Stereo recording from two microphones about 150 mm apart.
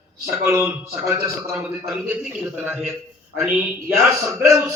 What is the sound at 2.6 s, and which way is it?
A man's voice, 5° right (ahead or behind).